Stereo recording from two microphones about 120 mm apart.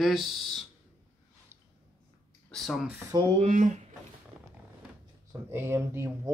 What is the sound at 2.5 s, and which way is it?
Speech, centre (ahead or behind).